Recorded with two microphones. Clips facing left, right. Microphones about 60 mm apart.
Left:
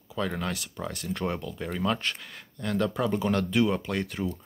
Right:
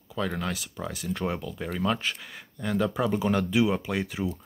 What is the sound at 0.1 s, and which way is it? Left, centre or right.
Speech, centre.